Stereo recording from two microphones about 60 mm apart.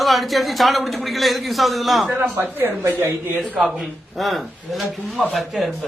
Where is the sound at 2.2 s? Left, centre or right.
Right.